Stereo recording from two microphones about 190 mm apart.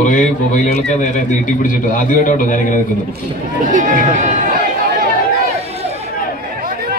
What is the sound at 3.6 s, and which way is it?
Speech, 40° right (ahead or behind).